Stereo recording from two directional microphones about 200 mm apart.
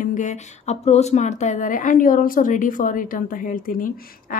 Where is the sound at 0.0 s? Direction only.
40° left (ahead or behind).